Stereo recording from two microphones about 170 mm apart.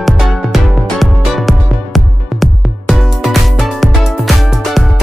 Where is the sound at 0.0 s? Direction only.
Centre (ahead or behind).